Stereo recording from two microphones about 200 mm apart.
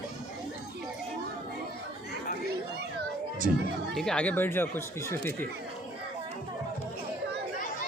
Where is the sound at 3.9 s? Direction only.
5° left (ahead or behind).